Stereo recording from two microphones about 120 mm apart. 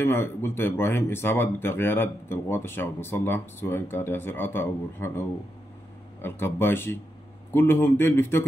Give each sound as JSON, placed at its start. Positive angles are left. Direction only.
{"t": 0.0, "sound": "speech", "side_deg": 20}
{"t": 6.2, "sound": "speech", "side_deg": 20}